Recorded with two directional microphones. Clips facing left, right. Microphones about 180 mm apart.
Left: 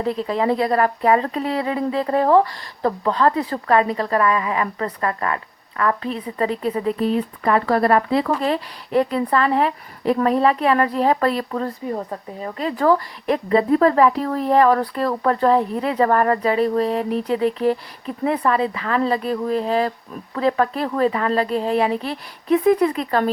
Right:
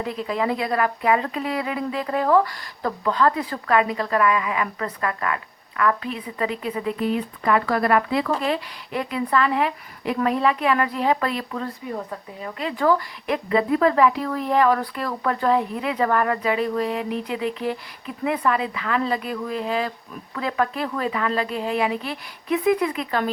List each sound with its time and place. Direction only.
0.0 s speech: 35° left (ahead or behind)